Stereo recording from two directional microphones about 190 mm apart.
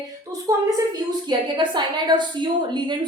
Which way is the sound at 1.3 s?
25° right (ahead or behind).